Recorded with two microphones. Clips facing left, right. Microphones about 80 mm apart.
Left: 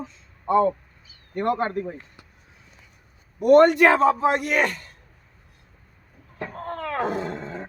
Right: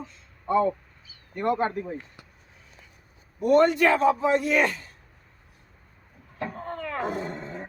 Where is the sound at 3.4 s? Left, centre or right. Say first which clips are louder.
Left 5 dB; left.